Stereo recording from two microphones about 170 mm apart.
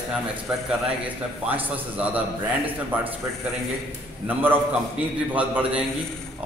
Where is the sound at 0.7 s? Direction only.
10° right (ahead or behind).